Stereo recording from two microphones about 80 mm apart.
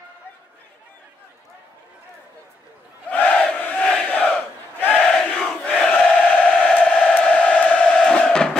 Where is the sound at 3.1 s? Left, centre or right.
Centre.